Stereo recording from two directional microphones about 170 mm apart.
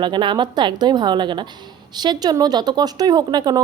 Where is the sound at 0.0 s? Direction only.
30° right (ahead or behind).